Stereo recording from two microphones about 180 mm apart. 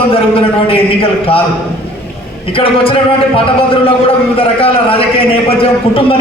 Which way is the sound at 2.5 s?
30° left (ahead or behind).